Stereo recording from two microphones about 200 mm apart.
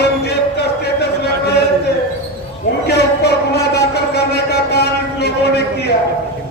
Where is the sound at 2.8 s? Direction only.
55° left (ahead or behind).